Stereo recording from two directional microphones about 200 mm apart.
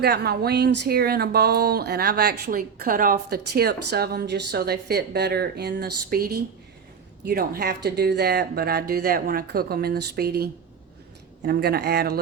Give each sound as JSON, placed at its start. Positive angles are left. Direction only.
{"t": 0.0, "sound": "speech", "side_deg": -55}